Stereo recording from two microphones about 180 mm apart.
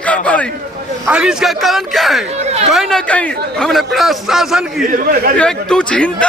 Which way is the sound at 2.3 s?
35° right (ahead or behind).